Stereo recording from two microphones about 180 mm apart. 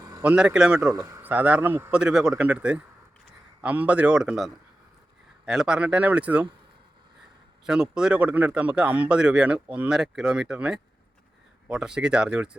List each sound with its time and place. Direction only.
0.0 s a sound: 20° right (ahead or behind)
0.3 s a man's voice: 5° right (ahead or behind)
0.8 s a man's voice: 20° right (ahead or behind)
7.7 s a man's voice: 5° right (ahead or behind)